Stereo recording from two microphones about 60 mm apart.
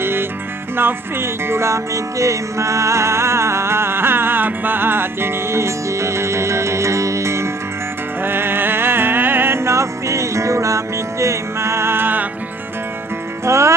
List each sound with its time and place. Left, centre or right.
0.0 s music: right
8.2 s music: right
13.5 s music: right